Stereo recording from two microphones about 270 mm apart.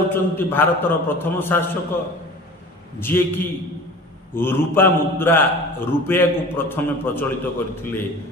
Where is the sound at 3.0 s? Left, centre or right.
Centre.